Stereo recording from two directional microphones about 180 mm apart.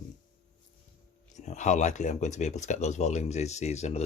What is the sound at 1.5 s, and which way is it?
Speech, 40° left (ahead or behind).